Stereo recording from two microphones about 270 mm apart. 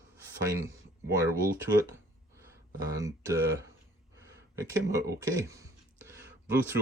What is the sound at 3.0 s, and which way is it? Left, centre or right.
Speech, centre.